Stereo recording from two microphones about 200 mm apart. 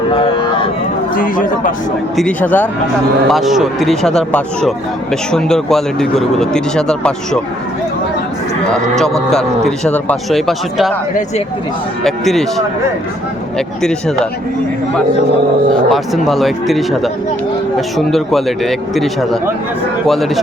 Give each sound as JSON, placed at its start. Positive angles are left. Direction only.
{"t": 0.1, "sound": "a sound", "side_deg": 25}
{"t": 1.1, "sound": "speech", "side_deg": 40}
{"t": 2.1, "sound": "speech", "side_deg": 5}
{"t": 9.3, "sound": "speech", "side_deg": 0}
{"t": 12.0, "sound": "speech", "side_deg": 0}
{"t": 15.9, "sound": "speech", "side_deg": 0}